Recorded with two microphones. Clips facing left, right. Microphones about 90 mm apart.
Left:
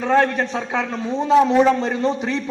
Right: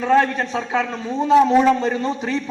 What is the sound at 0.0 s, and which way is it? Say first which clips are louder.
A man's voice: even; 30° left (ahead or behind).